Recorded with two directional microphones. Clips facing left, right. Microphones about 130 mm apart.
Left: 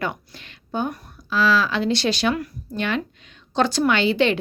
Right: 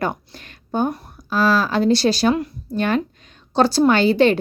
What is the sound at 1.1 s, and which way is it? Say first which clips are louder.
Speech: right 1 dB; 45° right (ahead or behind).